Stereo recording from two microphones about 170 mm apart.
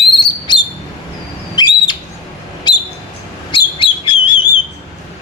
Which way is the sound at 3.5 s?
30° left (ahead or behind).